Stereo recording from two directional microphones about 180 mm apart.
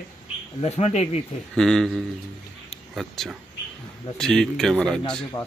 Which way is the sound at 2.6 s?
Centre (ahead or behind).